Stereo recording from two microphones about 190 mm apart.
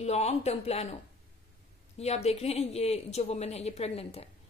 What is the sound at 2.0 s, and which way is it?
A woman's voice, 35° left (ahead or behind).